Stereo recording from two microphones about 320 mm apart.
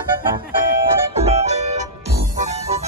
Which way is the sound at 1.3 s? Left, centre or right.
Centre.